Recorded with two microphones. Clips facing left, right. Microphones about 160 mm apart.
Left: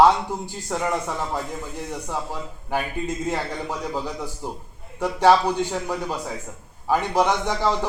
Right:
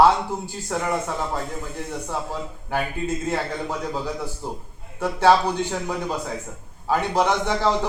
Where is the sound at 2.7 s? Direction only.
15° left (ahead or behind).